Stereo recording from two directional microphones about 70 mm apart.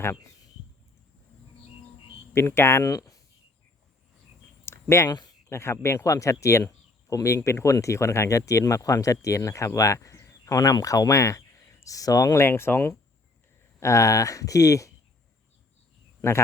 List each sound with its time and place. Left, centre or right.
2.3 s speech: left
4.6 s a sound: left
5.0 s speech: left
5.5 s speech: left